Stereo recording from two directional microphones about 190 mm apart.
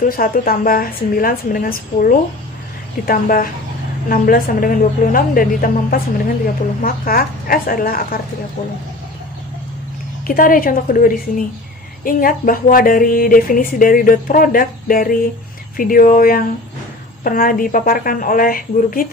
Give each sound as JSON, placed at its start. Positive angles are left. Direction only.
{"t": 0.0, "sound": "a woman's voice", "side_deg": 50}
{"t": 10.2, "sound": "a woman's voice", "side_deg": 45}